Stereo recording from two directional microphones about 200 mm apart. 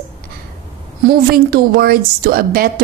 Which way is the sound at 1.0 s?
50° right (ahead or behind).